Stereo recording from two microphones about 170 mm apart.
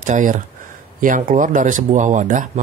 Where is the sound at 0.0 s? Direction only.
50° right (ahead or behind).